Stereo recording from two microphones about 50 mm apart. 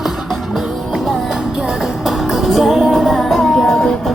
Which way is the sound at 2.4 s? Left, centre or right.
Centre.